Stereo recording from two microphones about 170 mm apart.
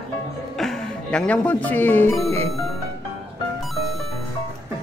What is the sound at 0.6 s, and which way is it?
Speech, 5° left (ahead or behind).